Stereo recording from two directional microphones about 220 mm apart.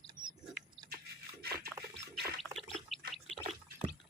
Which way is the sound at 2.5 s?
Centre (ahead or behind).